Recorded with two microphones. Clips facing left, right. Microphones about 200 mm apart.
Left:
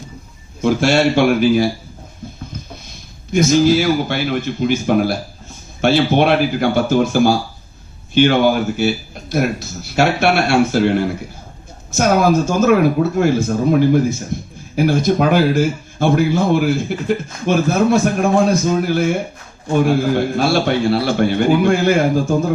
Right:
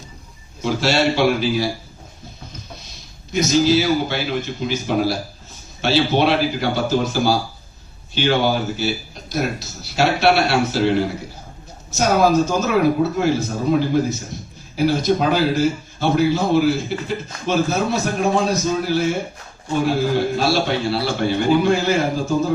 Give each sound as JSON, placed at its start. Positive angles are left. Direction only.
{"t": 0.6, "sound": "a man's voice", "side_deg": 50}
{"t": 3.3, "sound": "a man's voice", "side_deg": 55}
{"t": 20.1, "sound": "a man's voice", "side_deg": 55}